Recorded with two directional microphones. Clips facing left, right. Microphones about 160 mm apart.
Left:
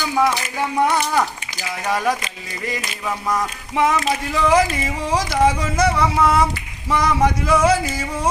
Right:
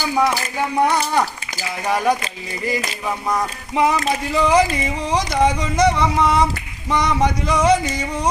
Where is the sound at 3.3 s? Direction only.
Centre (ahead or behind).